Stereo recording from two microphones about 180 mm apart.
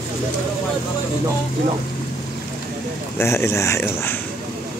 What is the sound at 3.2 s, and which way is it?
Speech, 15° left (ahead or behind).